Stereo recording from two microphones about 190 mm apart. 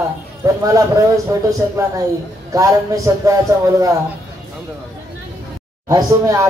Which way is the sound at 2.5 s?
15° right (ahead or behind).